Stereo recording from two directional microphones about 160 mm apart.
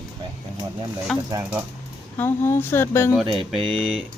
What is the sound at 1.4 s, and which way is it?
Speech, 10° right (ahead or behind).